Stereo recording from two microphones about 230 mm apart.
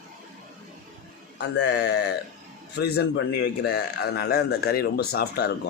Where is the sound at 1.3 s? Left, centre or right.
Left.